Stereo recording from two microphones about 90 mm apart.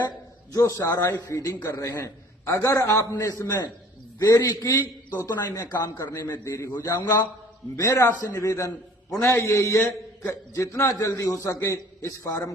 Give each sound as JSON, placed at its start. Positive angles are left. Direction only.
{"t": 0.5, "sound": "a man's voice", "side_deg": 35}
{"t": 5.4, "sound": "speech", "side_deg": 50}
{"t": 6.2, "sound": "a man's voice", "side_deg": 25}
{"t": 6.7, "sound": "a man's voice", "side_deg": 50}